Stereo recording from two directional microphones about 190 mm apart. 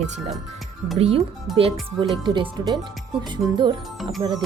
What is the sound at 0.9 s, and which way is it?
Speech, 30° right (ahead or behind).